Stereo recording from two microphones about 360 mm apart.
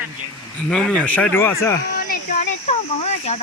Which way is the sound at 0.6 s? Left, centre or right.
Centre.